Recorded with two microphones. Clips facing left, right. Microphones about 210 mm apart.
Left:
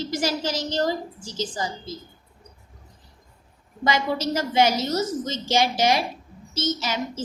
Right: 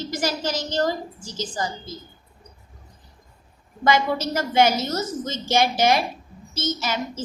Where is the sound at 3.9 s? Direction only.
55° right (ahead or behind).